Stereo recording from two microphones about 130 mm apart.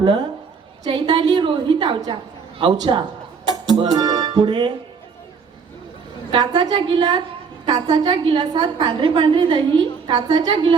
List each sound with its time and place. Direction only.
0.0 s a woman's voice: 35° right (ahead or behind)
3.8 s music: 30° right (ahead or behind)
6.3 s a woman's voice: 35° right (ahead or behind)